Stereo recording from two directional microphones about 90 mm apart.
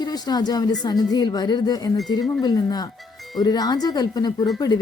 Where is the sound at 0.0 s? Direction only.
50° left (ahead or behind).